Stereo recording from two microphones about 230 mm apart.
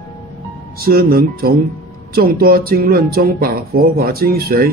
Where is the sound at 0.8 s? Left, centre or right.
Right.